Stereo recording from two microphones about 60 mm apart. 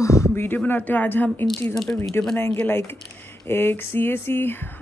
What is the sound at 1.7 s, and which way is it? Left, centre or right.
Speech, centre.